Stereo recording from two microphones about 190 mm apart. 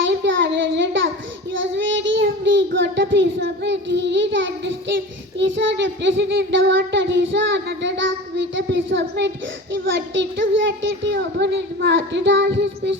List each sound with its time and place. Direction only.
0.0 s child singing: 70° right (ahead or behind)
9.7 s a child's voice: 75° right (ahead or behind)